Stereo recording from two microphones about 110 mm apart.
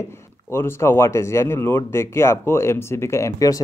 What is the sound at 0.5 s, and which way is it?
Speech, 20° left (ahead or behind).